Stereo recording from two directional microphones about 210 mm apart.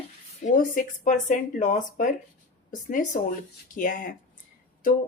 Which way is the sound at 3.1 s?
40° left (ahead or behind).